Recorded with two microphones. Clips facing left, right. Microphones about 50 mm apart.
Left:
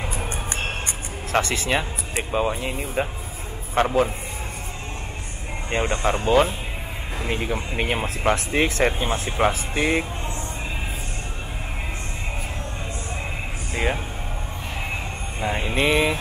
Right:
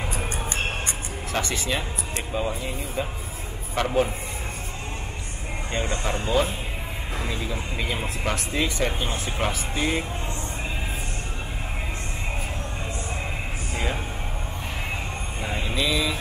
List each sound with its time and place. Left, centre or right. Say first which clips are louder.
1.3 s speech: left 5 dB; left
2.3 s speech: left 5 dB; left
3.8 s speech: left 5 dB; left
5.7 s speech: left 5 dB; left
8.2 s speech: left 6 dB; left
8.5 s speech: left 3 dB; left
9.0 s speech: left 5 dB; left
15.5 s speech: left 5 dB; left